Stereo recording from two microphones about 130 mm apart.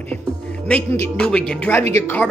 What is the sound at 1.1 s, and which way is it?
Speech, 5° left (ahead or behind).